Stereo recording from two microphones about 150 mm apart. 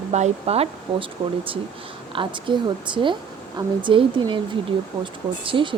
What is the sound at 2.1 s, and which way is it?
Speech, 30° right (ahead or behind).